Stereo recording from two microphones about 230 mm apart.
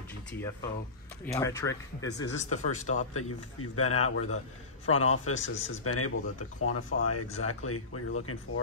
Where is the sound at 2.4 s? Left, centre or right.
Left.